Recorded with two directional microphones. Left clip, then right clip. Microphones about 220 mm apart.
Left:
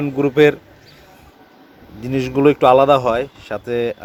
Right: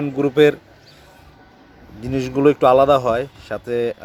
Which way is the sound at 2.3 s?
5° right (ahead or behind).